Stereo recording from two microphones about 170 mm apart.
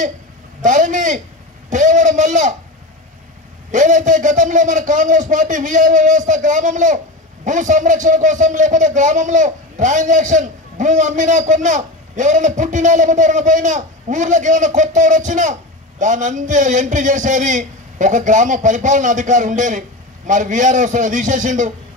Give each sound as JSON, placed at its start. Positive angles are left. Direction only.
{"t": 0.6, "sound": "a man's voice", "side_deg": -50}
{"t": 3.7, "sound": "a man's voice", "side_deg": -50}